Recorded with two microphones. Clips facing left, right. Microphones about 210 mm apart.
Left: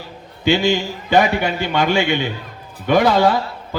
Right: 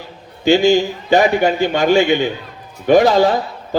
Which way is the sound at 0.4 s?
45° right (ahead or behind).